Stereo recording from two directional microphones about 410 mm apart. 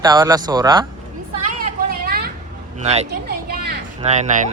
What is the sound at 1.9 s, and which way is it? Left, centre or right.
Vehicle, right.